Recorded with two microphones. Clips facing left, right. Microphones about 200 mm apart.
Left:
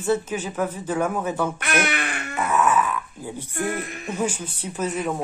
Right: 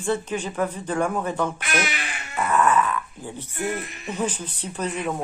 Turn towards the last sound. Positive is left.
turn(degrees=5)  # may be behind; listen again after turning